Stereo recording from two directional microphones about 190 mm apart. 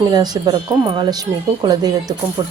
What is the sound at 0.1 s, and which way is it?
Speech, 20° right (ahead or behind).